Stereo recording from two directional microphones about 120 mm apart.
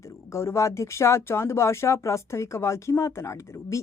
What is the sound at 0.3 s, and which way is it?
Speech, 25° left (ahead or behind).